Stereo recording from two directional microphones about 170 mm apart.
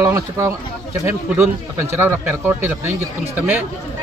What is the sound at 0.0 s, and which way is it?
Speech, 20° right (ahead or behind).